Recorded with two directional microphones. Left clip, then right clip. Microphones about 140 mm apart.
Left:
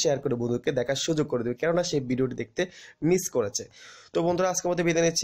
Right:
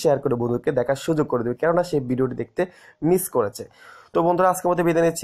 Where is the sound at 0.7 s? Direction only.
10° left (ahead or behind).